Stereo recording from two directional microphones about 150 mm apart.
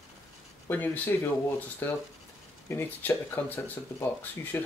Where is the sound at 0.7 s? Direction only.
10° left (ahead or behind).